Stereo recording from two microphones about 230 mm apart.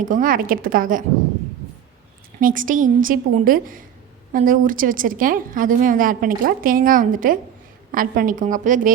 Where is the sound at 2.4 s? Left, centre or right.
Right.